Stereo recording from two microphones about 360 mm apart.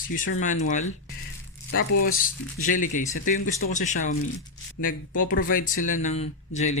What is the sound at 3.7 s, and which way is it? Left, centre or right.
Speech, centre.